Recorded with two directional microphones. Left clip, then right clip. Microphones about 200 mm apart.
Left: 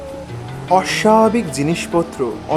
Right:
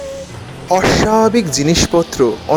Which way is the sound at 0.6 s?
15° right (ahead or behind).